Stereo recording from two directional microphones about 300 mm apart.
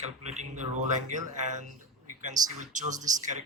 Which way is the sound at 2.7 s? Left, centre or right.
Right.